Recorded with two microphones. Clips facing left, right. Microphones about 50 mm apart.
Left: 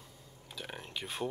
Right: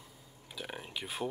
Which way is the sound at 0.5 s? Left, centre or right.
Centre.